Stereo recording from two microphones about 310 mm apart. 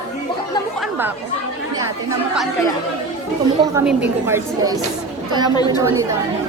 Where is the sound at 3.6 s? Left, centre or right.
Centre.